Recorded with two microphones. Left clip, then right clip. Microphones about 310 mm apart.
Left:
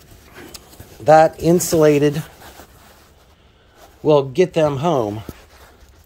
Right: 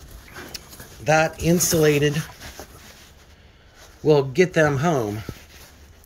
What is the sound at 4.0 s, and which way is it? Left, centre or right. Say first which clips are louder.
Speech: left 3 dB; centre.